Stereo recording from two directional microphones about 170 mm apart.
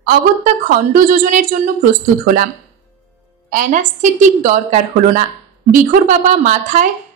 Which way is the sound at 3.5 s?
50° right (ahead or behind).